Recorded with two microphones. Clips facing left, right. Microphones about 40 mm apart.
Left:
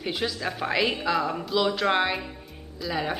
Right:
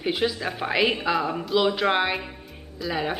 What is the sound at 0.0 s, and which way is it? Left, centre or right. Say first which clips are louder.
A woman's voice: right 4 dB; centre.